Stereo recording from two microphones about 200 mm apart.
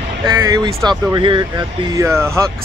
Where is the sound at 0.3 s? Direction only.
15° right (ahead or behind).